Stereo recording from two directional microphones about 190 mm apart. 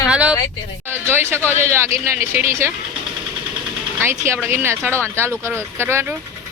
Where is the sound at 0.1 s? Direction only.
5° right (ahead or behind).